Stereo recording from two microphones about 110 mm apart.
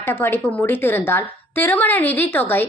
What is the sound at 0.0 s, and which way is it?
A woman's voice, 20° left (ahead or behind).